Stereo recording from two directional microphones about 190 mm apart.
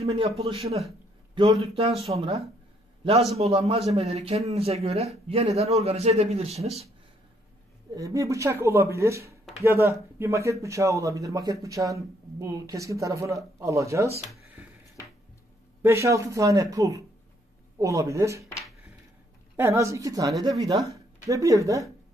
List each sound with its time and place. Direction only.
0.0 s a man's voice: 30° right (ahead or behind)
7.9 s speech: 15° right (ahead or behind)
15.8 s speech: 15° right (ahead or behind)
19.5 s speech: 15° right (ahead or behind)